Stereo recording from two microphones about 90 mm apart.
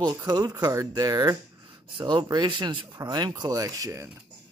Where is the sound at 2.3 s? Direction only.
55° right (ahead or behind); by 4.1 s 35° right (ahead or behind).